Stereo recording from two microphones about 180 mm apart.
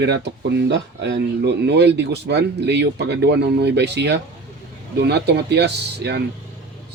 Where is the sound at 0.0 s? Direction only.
70° right (ahead or behind).